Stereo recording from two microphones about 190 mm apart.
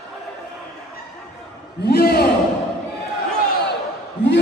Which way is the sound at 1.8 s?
55° left (ahead or behind).